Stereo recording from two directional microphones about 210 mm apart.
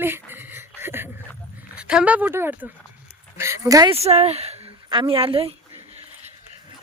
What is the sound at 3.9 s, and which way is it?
A woman's voice, 30° right (ahead or behind).